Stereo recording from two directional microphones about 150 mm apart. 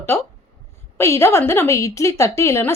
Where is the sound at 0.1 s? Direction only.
15° left (ahead or behind).